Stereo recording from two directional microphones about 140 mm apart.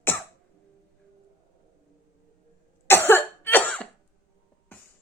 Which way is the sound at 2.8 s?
15° left (ahead or behind).